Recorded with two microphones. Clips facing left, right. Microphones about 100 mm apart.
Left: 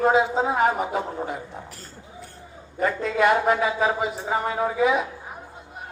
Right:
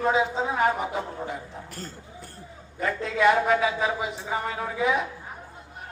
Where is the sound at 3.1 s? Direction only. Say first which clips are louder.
Even; 50° left (ahead or behind).